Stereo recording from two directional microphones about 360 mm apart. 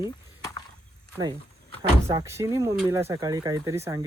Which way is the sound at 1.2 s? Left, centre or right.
Centre.